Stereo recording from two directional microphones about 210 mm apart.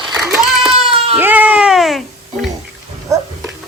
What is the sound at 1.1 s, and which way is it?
Music, 10° right (ahead or behind).